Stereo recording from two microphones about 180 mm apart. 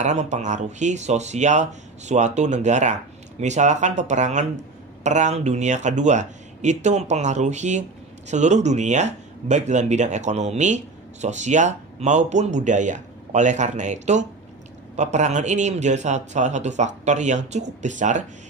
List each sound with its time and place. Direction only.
0.0 s speech: 40° right (ahead or behind)